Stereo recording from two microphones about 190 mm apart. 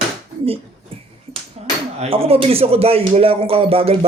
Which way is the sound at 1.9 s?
30° right (ahead or behind).